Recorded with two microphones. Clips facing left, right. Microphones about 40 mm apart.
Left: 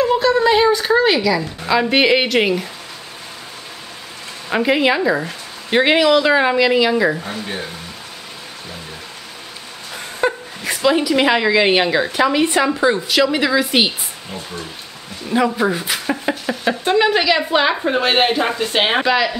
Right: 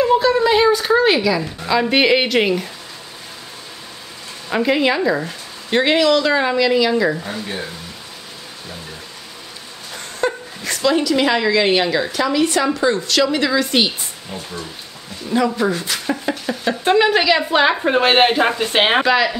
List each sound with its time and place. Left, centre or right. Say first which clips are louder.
0.1 s a sound: even; centre
1.1 s speech: even; centre
1.6 s speech: left 1 dB; centre
4.5 s speech: left 1 dB; centre
9.9 s speech: left 2 dB; centre
16.8 s speech: right 1 dB; centre
17.8 s speech: right 2 dB; centre
19.0 s speech: right 1 dB; centre